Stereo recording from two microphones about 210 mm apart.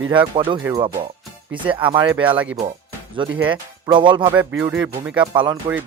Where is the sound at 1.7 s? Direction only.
25° right (ahead or behind).